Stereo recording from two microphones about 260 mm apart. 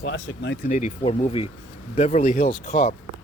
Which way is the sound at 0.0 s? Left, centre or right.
Left.